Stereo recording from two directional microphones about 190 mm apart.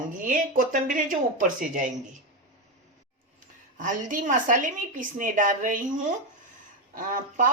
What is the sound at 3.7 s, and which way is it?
A woman's voice, 45° right (ahead or behind).